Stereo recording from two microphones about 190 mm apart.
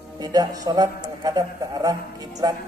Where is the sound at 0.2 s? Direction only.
20° right (ahead or behind).